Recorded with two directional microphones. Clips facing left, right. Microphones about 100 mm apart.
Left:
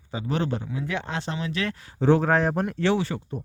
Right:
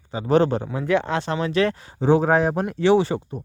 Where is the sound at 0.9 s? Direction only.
60° right (ahead or behind).